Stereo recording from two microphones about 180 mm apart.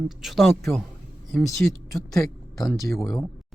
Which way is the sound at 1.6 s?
5° left (ahead or behind).